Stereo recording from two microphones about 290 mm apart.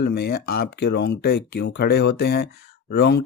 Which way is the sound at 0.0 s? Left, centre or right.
Left.